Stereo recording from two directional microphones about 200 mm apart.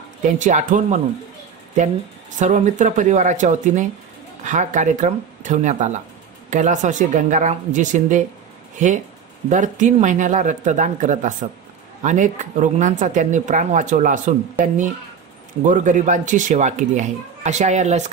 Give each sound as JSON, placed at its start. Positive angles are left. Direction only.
{"t": 0.2, "sound": "speech", "side_deg": -40}
{"t": 2.3, "sound": "speech", "side_deg": -40}